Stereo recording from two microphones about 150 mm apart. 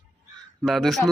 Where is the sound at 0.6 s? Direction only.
Centre (ahead or behind).